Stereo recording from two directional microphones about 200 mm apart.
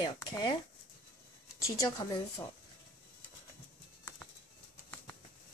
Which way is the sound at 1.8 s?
20° left (ahead or behind).